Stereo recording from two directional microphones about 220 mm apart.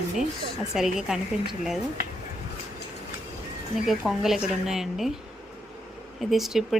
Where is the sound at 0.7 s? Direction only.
Centre (ahead or behind).